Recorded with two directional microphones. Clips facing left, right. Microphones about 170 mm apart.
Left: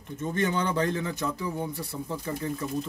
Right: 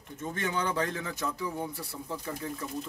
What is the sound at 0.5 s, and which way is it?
Speech, 5° right (ahead or behind).